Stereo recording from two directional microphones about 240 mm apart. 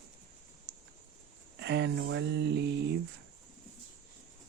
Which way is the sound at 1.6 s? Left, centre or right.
Right.